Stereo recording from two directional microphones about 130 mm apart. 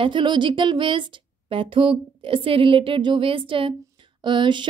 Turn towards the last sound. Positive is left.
turn(degrees=-35)  # may be behind; listen again after turning